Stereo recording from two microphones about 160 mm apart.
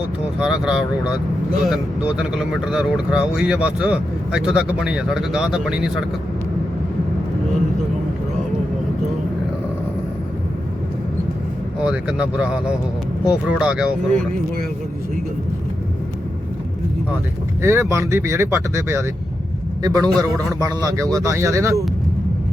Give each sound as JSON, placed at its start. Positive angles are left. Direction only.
{"t": 0.3, "sound": "speech", "side_deg": -5}
{"t": 11.8, "sound": "speech", "side_deg": -5}
{"t": 17.6, "sound": "speech", "side_deg": -15}